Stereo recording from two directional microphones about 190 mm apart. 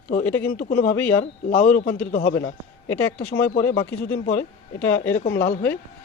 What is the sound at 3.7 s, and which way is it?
Speech, 60° left (ahead or behind).